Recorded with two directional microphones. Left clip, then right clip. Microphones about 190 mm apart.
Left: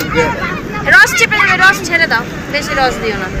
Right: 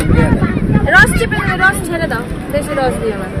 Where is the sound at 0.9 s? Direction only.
25° right (ahead or behind).